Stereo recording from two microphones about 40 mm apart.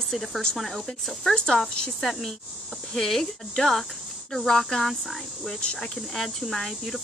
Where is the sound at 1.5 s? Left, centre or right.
Left.